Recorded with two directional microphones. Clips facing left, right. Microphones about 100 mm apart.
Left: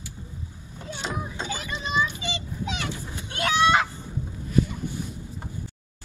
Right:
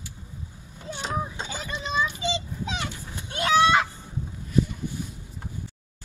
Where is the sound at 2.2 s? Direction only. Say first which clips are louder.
Right 3 dB; 30° right (ahead or behind).